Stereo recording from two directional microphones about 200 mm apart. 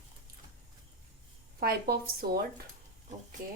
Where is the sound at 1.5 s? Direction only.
50° right (ahead or behind).